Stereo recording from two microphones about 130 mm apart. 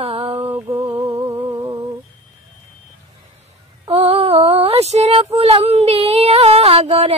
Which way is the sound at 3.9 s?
50° right (ahead or behind).